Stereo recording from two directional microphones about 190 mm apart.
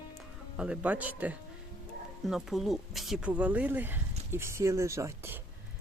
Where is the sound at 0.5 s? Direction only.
5° right (ahead or behind).